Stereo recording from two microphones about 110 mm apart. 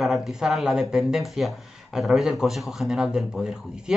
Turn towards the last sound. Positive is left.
turn(degrees=-5)  # may be behind; listen again after turning